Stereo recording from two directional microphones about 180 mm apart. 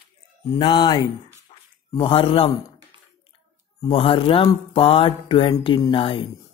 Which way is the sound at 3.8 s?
30° left (ahead or behind).